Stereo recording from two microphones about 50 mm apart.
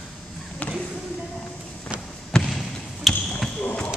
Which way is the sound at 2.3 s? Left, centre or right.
Centre.